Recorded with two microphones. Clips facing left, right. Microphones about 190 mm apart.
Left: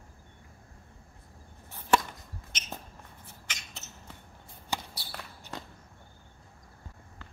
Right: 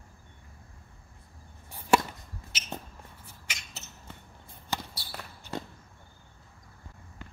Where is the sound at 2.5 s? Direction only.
5° right (ahead or behind).